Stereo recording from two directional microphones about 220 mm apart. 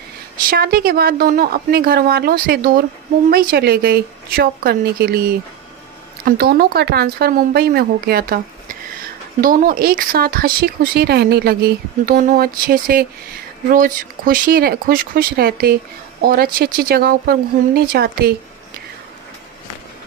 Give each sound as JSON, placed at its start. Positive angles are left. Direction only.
{"t": 0.5, "sound": "speech", "side_deg": -45}
{"t": 9.4, "sound": "speech", "side_deg": -40}